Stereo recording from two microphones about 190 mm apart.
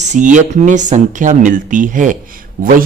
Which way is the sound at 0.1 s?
40° right (ahead or behind).